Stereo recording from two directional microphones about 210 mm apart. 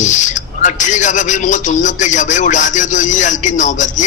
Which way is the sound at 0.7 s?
35° left (ahead or behind).